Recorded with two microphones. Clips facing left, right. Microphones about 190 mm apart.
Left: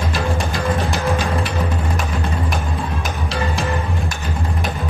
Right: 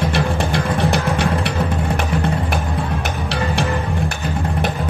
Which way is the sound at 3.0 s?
65° right (ahead or behind).